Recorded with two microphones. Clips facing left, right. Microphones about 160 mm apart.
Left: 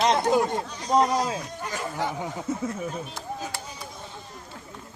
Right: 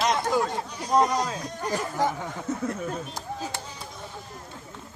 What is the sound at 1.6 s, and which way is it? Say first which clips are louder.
Music: right 6 dB; 40° right (ahead or behind).